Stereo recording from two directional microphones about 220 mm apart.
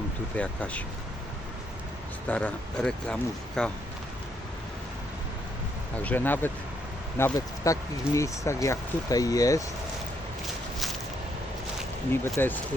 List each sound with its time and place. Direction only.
0.3 s speech: 5° left (ahead or behind)
2.2 s speech: 5° left (ahead or behind)
6.0 s speech: 10° left (ahead or behind)
12.3 s speech: 10° left (ahead or behind)